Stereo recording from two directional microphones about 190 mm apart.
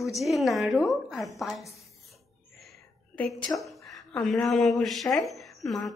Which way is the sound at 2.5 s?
5° left (ahead or behind).